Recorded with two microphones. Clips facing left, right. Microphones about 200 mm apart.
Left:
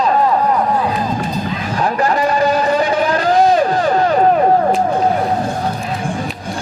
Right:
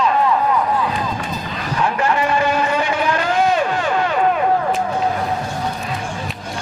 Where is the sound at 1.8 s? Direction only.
40° left (ahead or behind).